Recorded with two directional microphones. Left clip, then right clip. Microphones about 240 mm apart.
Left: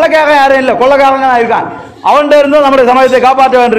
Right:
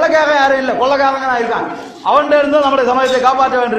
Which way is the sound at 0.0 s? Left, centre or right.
Left.